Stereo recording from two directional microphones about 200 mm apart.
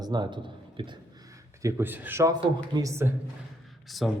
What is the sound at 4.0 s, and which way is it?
Speech, centre (ahead or behind).